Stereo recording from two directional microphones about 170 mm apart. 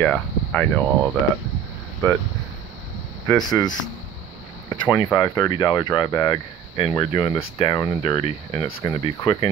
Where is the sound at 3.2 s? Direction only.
20° left (ahead or behind).